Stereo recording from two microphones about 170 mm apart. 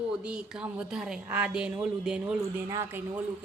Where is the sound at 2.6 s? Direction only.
15° right (ahead or behind).